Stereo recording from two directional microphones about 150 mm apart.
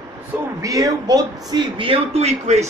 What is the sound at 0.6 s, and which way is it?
Speech, 20° right (ahead or behind).